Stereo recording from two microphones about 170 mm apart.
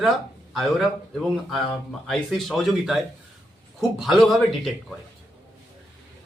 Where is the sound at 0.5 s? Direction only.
Centre (ahead or behind).